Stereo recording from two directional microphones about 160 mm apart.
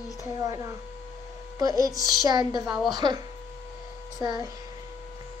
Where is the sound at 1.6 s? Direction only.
20° right (ahead or behind).